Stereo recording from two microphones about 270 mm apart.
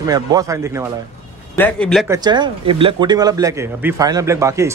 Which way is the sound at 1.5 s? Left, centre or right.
Centre.